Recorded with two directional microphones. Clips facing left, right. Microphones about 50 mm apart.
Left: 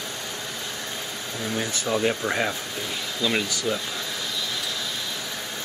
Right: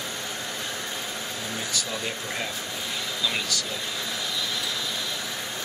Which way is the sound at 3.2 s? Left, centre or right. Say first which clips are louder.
Left 5 dB; centre.